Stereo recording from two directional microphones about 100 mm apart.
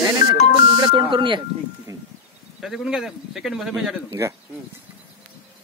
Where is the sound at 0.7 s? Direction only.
50° right (ahead or behind).